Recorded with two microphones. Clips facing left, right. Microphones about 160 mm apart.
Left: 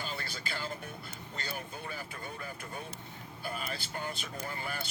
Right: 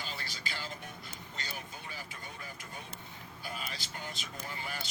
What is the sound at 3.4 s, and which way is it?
Speech, 50° left (ahead or behind).